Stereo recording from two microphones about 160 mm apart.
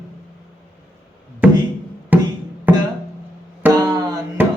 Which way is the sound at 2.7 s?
10° right (ahead or behind).